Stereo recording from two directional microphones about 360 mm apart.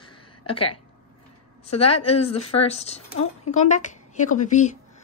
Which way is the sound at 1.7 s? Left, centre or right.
Centre.